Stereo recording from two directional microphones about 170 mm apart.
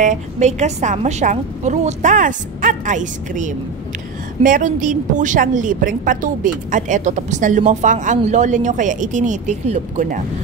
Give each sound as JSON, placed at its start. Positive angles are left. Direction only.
{"t": 0.0, "sound": "a woman's voice", "side_deg": -45}